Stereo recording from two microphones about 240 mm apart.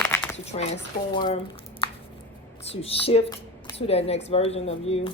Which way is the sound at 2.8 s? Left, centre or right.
Left.